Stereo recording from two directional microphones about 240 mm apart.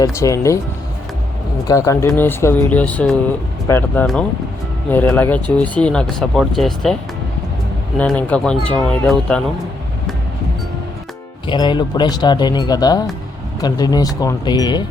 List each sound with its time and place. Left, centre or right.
0.0 s speech: centre
1.6 s speech: centre
7.9 s speech: centre
11.4 s speech: centre